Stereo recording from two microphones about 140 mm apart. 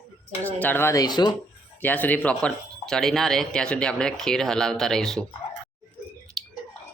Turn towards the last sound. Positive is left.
turn(degrees=0)  # may be behind; listen again after turning